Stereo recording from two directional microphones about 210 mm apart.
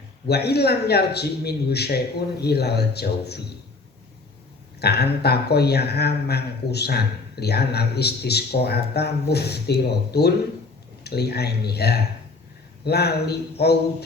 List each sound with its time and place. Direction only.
0.3 s speech: 50° left (ahead or behind)
4.8 s speech: 50° left (ahead or behind)